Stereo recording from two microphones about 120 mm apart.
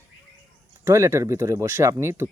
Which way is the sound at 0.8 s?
20° right (ahead or behind).